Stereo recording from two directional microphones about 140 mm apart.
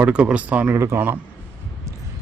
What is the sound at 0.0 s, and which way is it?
Speech, 10° right (ahead or behind).